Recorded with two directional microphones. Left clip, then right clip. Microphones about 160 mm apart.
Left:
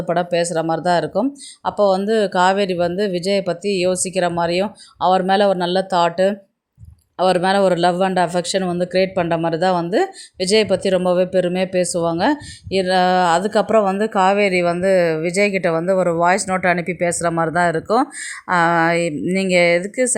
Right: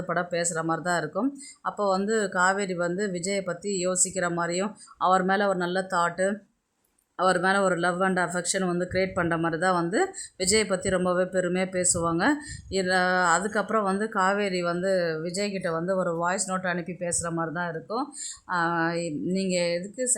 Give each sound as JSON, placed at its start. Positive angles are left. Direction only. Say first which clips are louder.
{"t": 0.1, "sound": "speech", "louder": "left 9 dB", "side_deg": 25}